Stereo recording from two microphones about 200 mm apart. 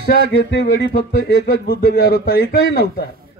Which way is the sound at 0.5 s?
55° left (ahead or behind).